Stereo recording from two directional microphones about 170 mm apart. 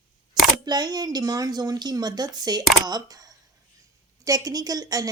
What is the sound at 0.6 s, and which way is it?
A woman's voice, 25° right (ahead or behind).